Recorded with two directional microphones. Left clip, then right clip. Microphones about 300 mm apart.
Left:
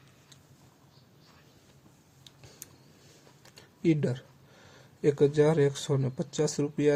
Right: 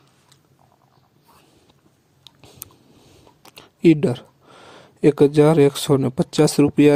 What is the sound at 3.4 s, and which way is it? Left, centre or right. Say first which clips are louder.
Speech: right 13 dB; right.